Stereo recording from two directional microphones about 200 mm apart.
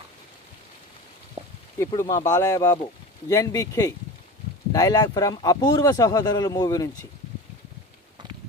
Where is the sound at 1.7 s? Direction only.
15° left (ahead or behind).